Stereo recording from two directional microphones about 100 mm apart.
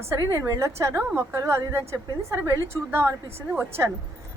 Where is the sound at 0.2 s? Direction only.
35° right (ahead or behind).